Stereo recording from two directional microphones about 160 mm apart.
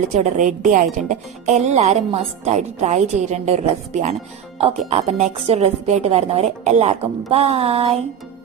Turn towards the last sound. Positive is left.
turn(degrees=-40)  # may be behind; listen again after turning